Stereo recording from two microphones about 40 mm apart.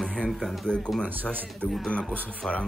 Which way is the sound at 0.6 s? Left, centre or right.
Left.